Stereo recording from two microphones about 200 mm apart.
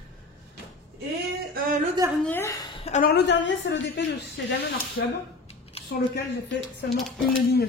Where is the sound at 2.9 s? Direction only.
45° left (ahead or behind); by 5.1 s 65° left (ahead or behind).